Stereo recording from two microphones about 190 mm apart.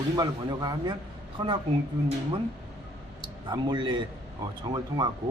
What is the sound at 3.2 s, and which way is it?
A man's voice, 25° right (ahead or behind).